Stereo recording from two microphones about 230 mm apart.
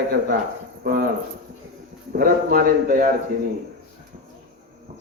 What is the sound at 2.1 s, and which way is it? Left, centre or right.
A man's voice, right.